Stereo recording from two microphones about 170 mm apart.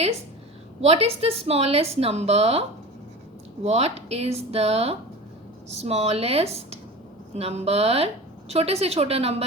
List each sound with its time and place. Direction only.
0.8 s speech: 35° right (ahead or behind)